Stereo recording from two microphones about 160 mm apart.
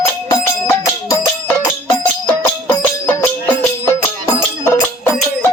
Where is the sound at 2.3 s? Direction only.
15° left (ahead or behind).